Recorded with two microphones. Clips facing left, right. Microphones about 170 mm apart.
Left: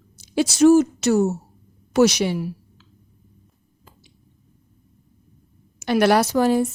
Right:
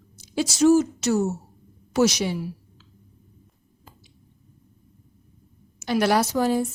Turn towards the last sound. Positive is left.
turn(degrees=70)  # may be behind; listen again after turning